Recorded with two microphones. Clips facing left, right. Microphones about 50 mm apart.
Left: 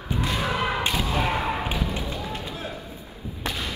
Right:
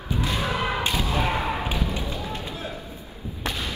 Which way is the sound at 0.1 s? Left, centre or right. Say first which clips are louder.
Even; left.